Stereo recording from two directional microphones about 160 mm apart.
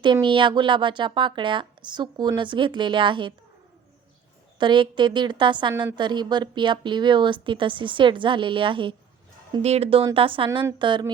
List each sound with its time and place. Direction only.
0.0 s a woman's voice: 30° right (ahead or behind)
4.5 s a woman's voice: 30° right (ahead or behind)
9.6 s a woman's voice: 40° right (ahead or behind)